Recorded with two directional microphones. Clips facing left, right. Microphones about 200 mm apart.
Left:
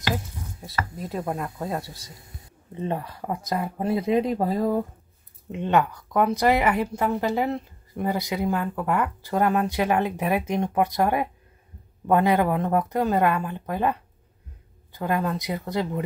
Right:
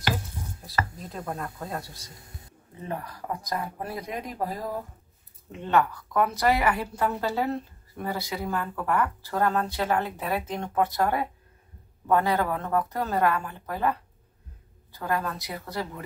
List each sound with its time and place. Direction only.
1.0 s speech: 25° left (ahead or behind)
5.5 s speech: 20° left (ahead or behind)